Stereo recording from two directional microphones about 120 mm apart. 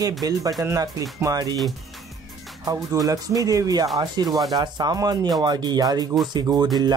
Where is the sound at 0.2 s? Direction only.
30° right (ahead or behind).